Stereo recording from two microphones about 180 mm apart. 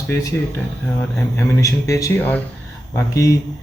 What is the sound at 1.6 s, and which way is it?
Speech, 20° left (ahead or behind).